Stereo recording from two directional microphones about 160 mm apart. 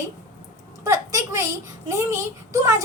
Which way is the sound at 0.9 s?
20° right (ahead or behind).